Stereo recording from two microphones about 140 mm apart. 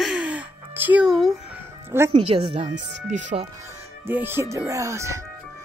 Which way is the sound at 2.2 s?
45° right (ahead or behind).